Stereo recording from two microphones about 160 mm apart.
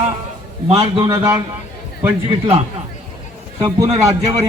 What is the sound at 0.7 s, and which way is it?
Speech, 35° right (ahead or behind).